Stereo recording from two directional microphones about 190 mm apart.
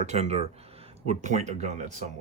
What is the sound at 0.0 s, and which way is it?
Speech, 35° right (ahead or behind).